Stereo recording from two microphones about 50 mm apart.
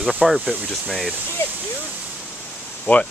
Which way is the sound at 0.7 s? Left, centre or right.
Centre.